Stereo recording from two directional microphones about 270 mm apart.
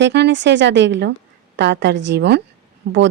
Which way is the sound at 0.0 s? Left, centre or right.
Right.